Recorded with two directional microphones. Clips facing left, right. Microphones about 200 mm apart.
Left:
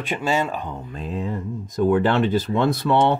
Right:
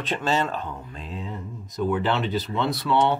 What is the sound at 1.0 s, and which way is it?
Speech, 50° left (ahead or behind).